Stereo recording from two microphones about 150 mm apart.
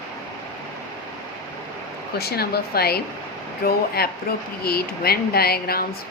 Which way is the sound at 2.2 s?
90° left.